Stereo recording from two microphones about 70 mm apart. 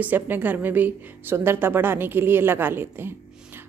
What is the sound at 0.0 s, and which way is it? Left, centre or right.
A woman's voice, right.